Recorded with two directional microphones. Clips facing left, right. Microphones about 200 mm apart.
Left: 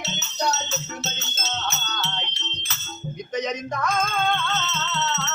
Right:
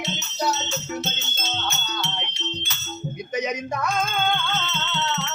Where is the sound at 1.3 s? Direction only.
Centre (ahead or behind).